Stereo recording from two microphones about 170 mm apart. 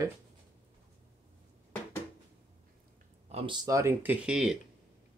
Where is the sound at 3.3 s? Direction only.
30° right (ahead or behind); by 4.6 s 5° right (ahead or behind).